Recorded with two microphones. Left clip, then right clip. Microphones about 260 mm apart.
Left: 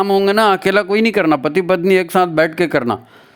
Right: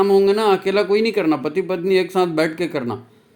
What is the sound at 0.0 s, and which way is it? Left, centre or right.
Speech, left.